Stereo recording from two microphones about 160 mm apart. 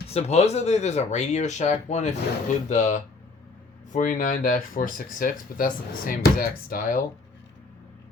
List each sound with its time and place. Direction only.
0.1 s speech: 45° left (ahead or behind); by 7.0 s 65° left (ahead or behind)